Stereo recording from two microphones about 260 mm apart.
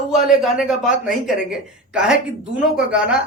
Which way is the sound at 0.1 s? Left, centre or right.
Centre.